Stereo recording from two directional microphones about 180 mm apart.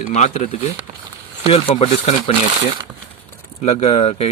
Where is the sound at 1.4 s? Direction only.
35° left (ahead or behind).